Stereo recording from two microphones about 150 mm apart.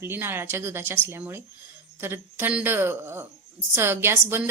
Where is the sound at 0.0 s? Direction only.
15° right (ahead or behind).